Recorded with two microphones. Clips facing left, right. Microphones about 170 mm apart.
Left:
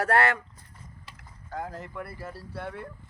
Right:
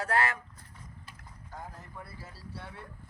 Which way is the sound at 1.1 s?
85° left.